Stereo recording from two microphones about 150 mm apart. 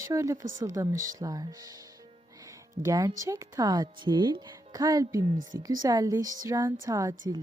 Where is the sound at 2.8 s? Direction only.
20° right (ahead or behind).